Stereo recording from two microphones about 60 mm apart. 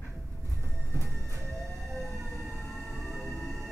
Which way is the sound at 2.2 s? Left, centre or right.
Centre.